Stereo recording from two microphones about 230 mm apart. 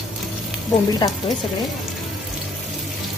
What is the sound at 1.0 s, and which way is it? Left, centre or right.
Speech, centre.